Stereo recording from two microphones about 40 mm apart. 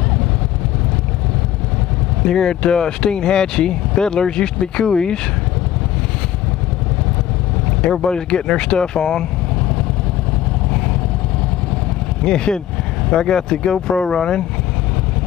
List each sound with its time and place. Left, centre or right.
2.2 s speech: centre
7.9 s speech: centre
12.2 s speech: centre